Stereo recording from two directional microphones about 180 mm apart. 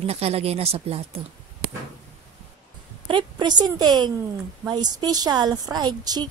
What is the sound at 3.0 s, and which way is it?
A woman's voice, 25° right (ahead or behind).